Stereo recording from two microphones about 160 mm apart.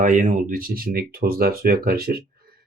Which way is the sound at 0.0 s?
55° right (ahead or behind).